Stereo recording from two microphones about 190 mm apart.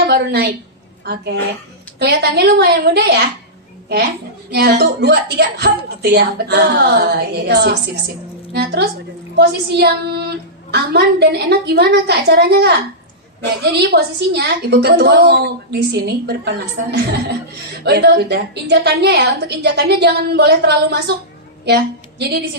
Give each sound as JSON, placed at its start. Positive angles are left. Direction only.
{"t": 0.0, "sound": "a woman's voice", "side_deg": -60}
{"t": 4.5, "sound": "a woman's voice", "side_deg": -60}